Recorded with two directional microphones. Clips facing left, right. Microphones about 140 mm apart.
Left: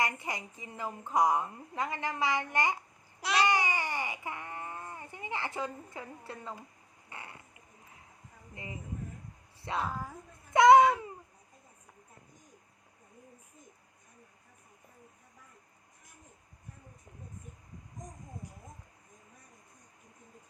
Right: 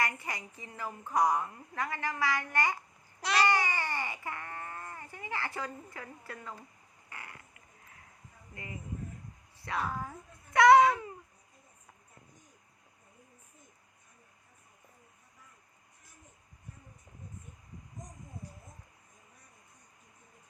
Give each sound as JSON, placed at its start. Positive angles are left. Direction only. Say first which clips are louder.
{"t": 0.0, "sound": "a woman's voice", "louder": "left 1 dB", "side_deg": 20}
{"t": 3.2, "sound": "babbling", "louder": "even", "side_deg": 0}
{"t": 3.4, "sound": "baby cry", "louder": "even", "side_deg": 15}
{"t": 7.1, "sound": "a sound", "louder": "left 1 dB", "side_deg": 25}
{"t": 8.6, "sound": "a woman's voice", "louder": "even", "side_deg": 25}
{"t": 9.9, "sound": "babbling", "louder": "right 1 dB", "side_deg": 5}
{"t": 10.5, "sound": "a woman's voice", "louder": "left 1 dB", "side_deg": 20}
{"t": 10.8, "sound": "babbling", "louder": "left 1 dB", "side_deg": 0}